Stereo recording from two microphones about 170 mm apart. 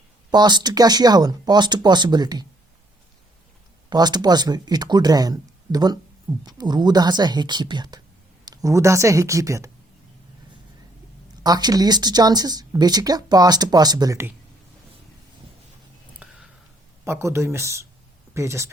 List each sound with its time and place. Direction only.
0.3 s speech: 25° right (ahead or behind)
3.8 s speech: 25° right (ahead or behind)
11.4 s speech: 25° right (ahead or behind)
16.2 s a sound: 5° right (ahead or behind)
17.1 s speech: 15° right (ahead or behind)